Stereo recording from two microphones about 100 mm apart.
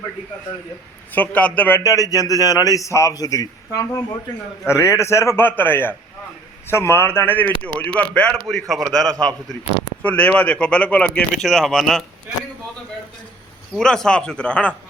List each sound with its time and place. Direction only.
1.1 s speech: 15° left (ahead or behind)
1.8 s a man's voice: 35° left (ahead or behind); by 11.3 s 15° left (ahead or behind)
11.4 s a man's voice: centre (ahead or behind)
13.7 s speech: 5° left (ahead or behind)